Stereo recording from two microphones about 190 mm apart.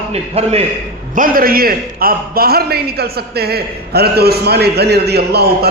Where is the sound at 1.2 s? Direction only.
50° right (ahead or behind).